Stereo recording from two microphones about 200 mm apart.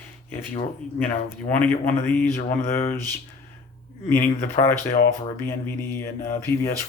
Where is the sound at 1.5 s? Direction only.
10° left (ahead or behind).